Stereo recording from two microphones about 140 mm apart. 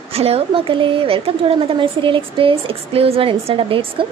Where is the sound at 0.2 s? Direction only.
45° right (ahead or behind).